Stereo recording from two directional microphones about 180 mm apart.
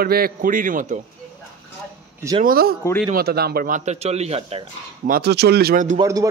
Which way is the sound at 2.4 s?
55° right (ahead or behind).